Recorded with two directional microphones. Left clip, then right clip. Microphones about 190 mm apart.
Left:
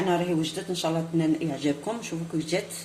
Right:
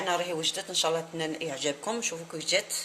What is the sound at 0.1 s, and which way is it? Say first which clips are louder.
Speech: left 2 dB; 50° right (ahead or behind).